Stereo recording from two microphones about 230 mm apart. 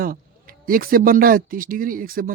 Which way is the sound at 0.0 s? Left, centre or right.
Right.